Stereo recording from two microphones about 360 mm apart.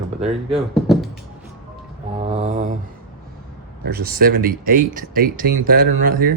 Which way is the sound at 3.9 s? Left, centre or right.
Right.